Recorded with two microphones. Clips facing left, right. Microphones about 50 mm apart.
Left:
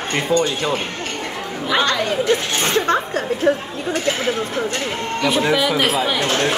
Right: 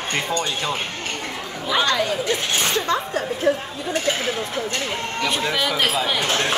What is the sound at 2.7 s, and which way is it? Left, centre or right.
Speech, left.